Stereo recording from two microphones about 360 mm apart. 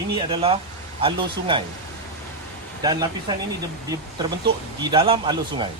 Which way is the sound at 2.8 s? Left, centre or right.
Centre.